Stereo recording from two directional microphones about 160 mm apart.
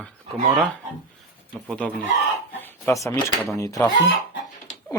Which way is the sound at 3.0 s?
15° left (ahead or behind).